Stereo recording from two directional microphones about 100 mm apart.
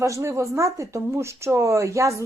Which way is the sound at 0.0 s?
30° right (ahead or behind).